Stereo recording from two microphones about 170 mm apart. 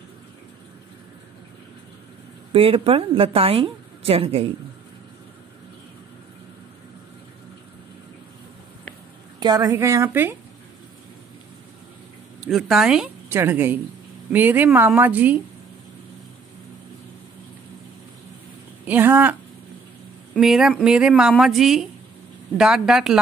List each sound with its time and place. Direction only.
2.5 s a woman's voice: 35° right (ahead or behind)
9.4 s a woman's voice: 25° right (ahead or behind)
12.4 s a woman's voice: centre (ahead or behind)
18.9 s a woman's voice: 10° right (ahead or behind)
20.3 s speech: centre (ahead or behind)